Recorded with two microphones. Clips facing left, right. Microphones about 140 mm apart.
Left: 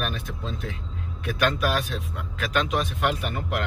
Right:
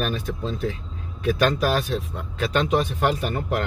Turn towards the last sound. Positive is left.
turn(degrees=-35)  # may be behind; listen again after turning